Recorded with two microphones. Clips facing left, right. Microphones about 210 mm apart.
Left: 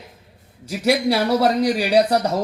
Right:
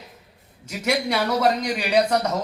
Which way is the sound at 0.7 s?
35° left (ahead or behind).